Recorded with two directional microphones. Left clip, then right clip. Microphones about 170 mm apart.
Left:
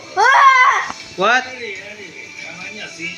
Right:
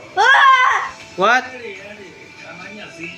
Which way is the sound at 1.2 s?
Centre (ahead or behind).